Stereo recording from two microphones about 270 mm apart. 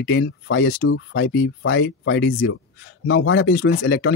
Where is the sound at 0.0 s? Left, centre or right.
Left.